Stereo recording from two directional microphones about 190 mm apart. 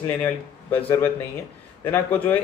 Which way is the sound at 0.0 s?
10° left (ahead or behind).